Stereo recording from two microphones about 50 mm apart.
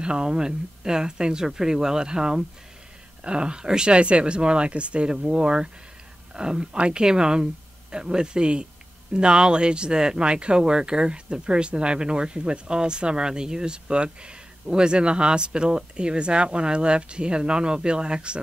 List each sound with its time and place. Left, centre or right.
0.0 s speech: centre